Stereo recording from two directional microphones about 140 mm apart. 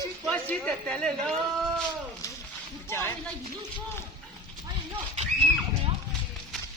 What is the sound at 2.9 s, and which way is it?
Speech, 15° left (ahead or behind).